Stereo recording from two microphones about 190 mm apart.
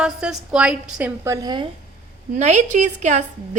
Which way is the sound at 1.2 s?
20° right (ahead or behind).